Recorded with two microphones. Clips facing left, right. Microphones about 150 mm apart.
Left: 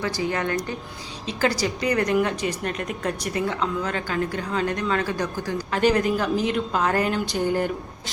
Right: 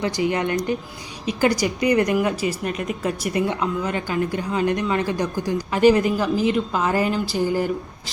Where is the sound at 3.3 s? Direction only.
20° right (ahead or behind).